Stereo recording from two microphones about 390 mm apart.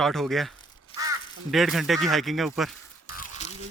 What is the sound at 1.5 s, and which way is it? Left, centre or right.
Speech, centre.